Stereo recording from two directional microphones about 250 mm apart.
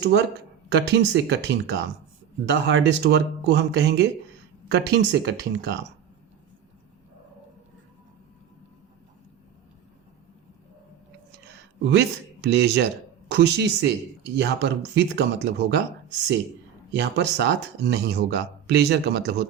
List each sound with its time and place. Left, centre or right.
0.7 s speech: right
11.8 s speech: right
17.0 s speech: right